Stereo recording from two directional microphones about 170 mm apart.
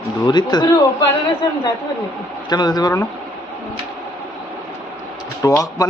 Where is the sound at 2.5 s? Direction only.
25° left (ahead or behind).